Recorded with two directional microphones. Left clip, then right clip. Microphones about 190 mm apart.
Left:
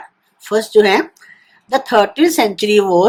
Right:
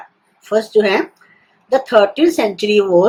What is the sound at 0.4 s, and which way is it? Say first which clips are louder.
Speech: left 2 dB; 60° left (ahead or behind).